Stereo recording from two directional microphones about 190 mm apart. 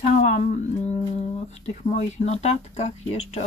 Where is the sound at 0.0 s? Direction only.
40° left (ahead or behind).